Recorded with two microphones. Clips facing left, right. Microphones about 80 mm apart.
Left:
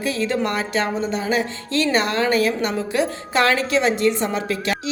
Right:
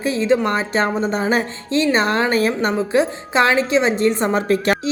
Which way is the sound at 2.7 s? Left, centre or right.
Right.